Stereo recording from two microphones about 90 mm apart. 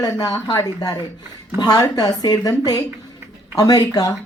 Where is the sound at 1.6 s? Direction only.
45° left (ahead or behind).